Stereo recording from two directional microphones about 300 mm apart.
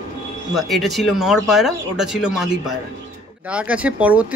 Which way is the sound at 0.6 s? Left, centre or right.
Centre.